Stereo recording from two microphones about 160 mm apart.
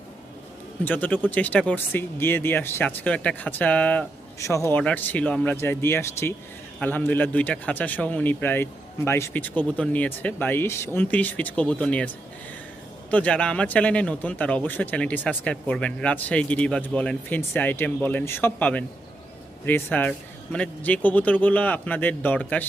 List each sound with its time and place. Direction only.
0.9 s speech: 10° left (ahead or behind)